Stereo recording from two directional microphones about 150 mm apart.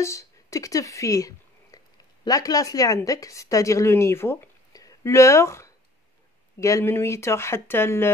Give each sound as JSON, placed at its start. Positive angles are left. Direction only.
{"t": 0.0, "sound": "a woman's voice", "side_deg": 20}